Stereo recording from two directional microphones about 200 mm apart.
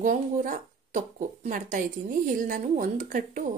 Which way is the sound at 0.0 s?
40° right (ahead or behind).